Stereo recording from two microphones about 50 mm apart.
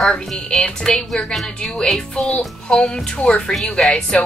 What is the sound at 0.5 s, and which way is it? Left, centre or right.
A woman's voice, centre.